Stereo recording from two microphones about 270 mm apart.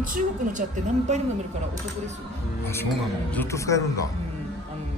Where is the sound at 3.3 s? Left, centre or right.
Centre.